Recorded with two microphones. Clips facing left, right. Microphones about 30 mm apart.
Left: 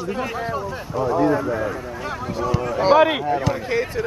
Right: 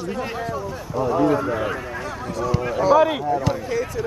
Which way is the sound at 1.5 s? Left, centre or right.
Right.